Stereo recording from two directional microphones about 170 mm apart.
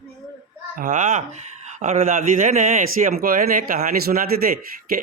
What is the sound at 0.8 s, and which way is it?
Speech, 50° right (ahead or behind).